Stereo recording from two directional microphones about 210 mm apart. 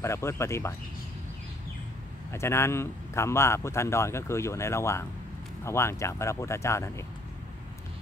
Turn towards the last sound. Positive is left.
turn(degrees=15)  # may be behind; listen again after turning